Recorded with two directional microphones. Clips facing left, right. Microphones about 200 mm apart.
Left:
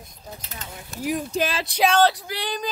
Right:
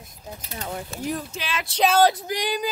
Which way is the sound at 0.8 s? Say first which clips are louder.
Left 6 dB; centre (ahead or behind).